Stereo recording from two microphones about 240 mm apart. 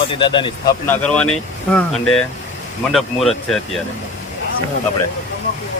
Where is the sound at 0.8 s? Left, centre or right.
Centre.